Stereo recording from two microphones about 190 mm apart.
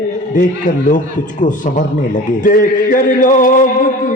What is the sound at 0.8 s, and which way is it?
A man's voice, 40° left (ahead or behind).